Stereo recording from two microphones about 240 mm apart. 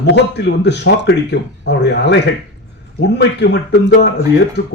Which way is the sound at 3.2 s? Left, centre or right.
Left.